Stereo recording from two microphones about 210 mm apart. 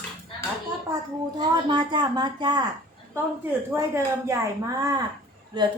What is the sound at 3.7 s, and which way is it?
A woman's voice, 15° right (ahead or behind).